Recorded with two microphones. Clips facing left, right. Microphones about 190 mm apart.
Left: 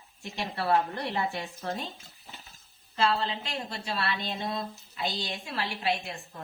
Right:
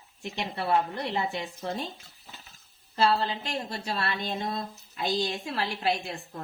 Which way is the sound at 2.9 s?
40° right (ahead or behind).